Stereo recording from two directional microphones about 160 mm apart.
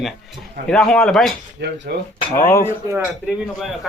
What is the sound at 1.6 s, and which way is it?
Speech, 85° right.